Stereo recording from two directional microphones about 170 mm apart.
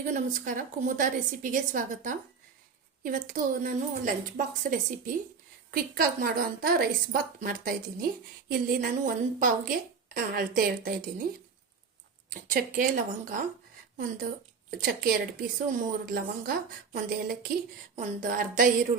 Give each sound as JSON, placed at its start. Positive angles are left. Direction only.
{"t": 0.0, "sound": "a woman's voice", "side_deg": -50}
{"t": 12.3, "sound": "a woman's voice", "side_deg": -55}
{"t": 14.8, "sound": "a woman's voice", "side_deg": -60}